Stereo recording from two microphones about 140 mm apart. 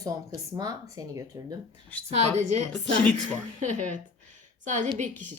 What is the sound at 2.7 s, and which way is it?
Speech, 10° left (ahead or behind).